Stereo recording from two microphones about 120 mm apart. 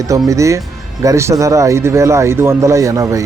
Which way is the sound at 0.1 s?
25° right (ahead or behind).